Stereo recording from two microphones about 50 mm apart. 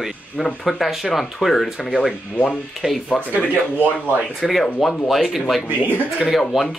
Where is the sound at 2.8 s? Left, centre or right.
Right.